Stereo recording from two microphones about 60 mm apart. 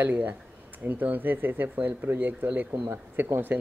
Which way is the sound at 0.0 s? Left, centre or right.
Right.